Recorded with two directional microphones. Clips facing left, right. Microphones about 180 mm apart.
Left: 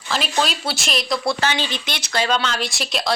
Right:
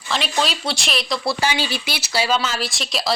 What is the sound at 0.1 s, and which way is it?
Speech, centre (ahead or behind).